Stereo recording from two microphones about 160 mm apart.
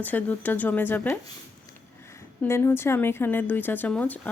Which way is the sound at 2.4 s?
15° left (ahead or behind).